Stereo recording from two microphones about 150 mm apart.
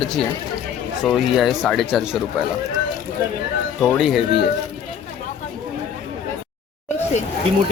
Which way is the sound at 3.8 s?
Centre (ahead or behind).